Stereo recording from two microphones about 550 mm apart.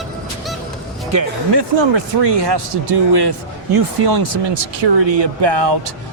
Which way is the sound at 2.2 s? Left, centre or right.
Right.